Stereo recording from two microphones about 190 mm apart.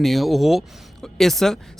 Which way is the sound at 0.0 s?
Centre (ahead or behind).